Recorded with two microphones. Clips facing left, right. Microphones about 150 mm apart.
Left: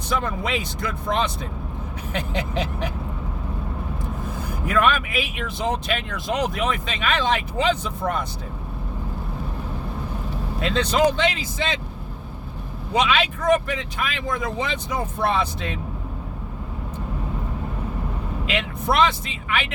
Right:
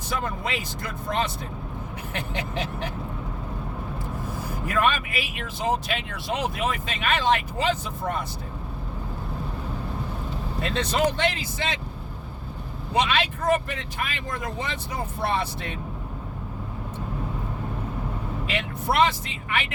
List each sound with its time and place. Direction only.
0.2 s speech: 75° left (ahead or behind)
2.1 s speech: 90° left
4.3 s speech: 75° left (ahead or behind)
10.6 s speech: 90° left
12.9 s speech: 90° left
18.4 s speech: 85° left